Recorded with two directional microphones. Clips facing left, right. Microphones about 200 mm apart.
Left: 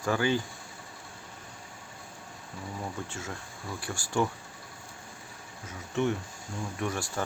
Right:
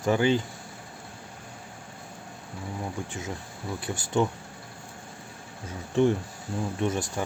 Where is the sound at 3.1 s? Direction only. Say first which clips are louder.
Right 4 dB; 15° right (ahead or behind).